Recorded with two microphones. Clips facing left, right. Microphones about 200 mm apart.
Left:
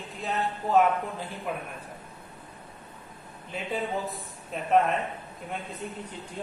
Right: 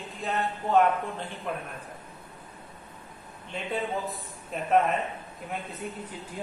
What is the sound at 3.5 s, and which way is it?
A man's voice, 5° left (ahead or behind).